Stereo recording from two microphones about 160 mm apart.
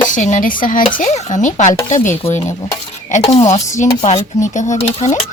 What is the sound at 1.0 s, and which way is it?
Speech, 45° left (ahead or behind).